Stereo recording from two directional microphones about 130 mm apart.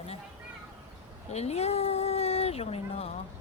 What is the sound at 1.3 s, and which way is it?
Speech, 55° left (ahead or behind).